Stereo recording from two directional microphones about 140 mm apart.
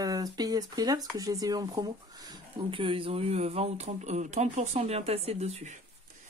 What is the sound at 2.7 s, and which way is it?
Speech, 40° right (ahead or behind).